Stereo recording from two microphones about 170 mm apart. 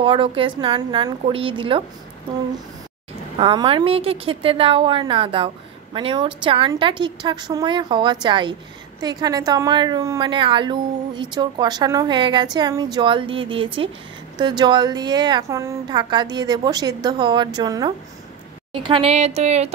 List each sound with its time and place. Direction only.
0.0 s a woman's voice: 30° right (ahead or behind)
3.3 s a woman's voice: 30° right (ahead or behind)